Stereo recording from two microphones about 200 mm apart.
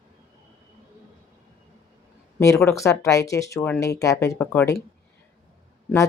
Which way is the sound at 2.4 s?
15° left (ahead or behind).